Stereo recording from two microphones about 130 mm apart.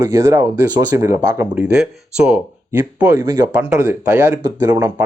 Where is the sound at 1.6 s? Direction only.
5° right (ahead or behind); by 3.5 s 25° right (ahead or behind).